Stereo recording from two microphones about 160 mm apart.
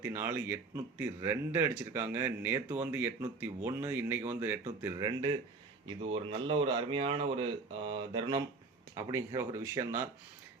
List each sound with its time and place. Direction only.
0.0 s speech: 15° right (ahead or behind)
6.0 s speech: 35° right (ahead or behind)
9.0 s speech: 20° right (ahead or behind)